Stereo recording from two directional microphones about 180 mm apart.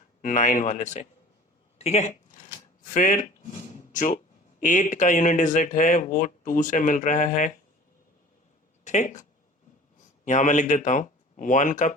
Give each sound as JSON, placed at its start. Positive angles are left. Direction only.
{"t": 0.2, "sound": "speech", "side_deg": 45}
{"t": 1.8, "sound": "a sound", "side_deg": 35}
{"t": 2.8, "sound": "speech", "side_deg": 45}
{"t": 8.8, "sound": "speech", "side_deg": 40}